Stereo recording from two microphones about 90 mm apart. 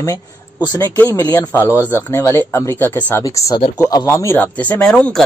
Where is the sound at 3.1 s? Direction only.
35° left (ahead or behind).